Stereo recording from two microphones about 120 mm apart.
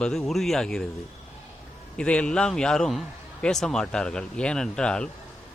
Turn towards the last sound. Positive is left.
turn(degrees=5)  # may be behind; listen again after turning